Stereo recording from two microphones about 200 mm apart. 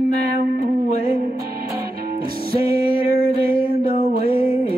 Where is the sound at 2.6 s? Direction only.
50° right (ahead or behind).